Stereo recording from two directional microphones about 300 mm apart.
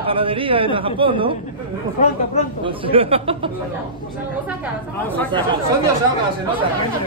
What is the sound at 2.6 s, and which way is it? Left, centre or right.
Speech, centre.